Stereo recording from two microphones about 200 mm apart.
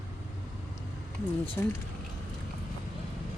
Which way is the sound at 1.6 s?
15° left (ahead or behind).